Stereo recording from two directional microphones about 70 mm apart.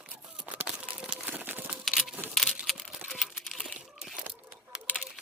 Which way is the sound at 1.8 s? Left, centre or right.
Centre.